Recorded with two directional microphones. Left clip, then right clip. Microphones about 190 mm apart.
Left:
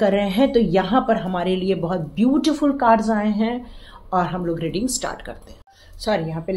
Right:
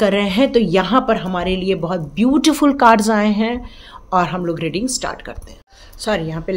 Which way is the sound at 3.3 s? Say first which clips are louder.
Right 4 dB; 35° right (ahead or behind).